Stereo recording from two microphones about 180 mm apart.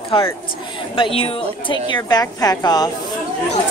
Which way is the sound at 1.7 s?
25° left (ahead or behind).